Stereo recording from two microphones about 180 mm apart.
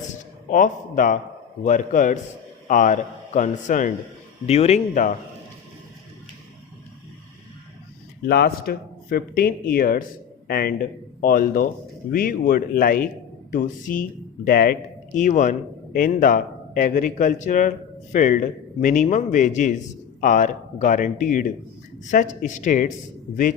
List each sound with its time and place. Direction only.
0.1 s a man's voice: 45° left (ahead or behind)
8.3 s a man's voice: 60° left (ahead or behind)
15.2 s a man's voice: 45° left (ahead or behind)